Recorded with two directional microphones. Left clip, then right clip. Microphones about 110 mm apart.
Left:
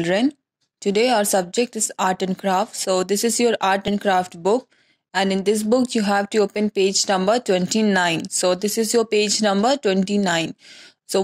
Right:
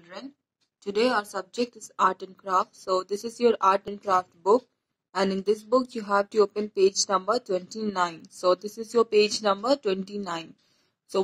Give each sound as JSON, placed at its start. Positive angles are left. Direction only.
{"t": 0.8, "sound": "speech", "side_deg": 30}